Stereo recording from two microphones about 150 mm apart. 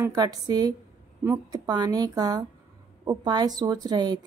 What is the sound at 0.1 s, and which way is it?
A woman's voice, 25° right (ahead or behind).